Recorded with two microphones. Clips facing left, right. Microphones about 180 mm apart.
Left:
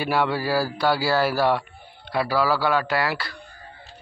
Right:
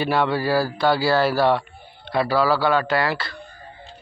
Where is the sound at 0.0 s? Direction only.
10° left (ahead or behind).